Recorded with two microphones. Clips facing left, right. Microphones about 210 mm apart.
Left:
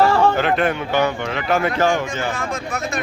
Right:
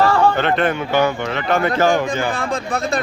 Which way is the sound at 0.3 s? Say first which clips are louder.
Right 1 dB; 5° left (ahead or behind).